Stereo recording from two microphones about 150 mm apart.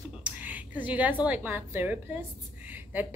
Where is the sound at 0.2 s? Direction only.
10° right (ahead or behind).